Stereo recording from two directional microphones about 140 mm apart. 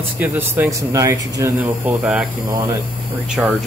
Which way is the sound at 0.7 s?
25° right (ahead or behind).